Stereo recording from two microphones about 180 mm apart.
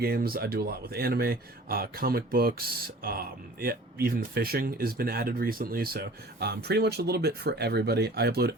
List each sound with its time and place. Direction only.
0.0 s speech: 60° right (ahead or behind)